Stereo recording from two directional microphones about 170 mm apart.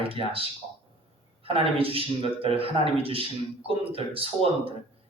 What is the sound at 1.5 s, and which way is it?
Speech, 35° right (ahead or behind).